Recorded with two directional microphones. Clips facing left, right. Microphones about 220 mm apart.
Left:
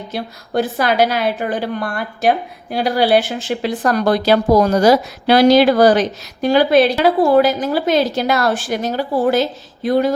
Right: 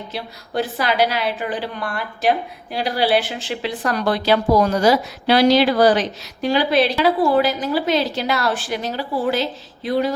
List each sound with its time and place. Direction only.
0.1 s speech: 45° left (ahead or behind)